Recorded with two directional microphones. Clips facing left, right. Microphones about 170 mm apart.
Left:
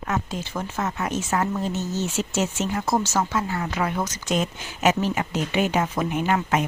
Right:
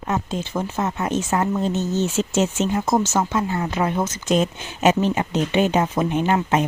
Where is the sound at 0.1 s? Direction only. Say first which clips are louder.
Right 4 dB; 25° right (ahead or behind).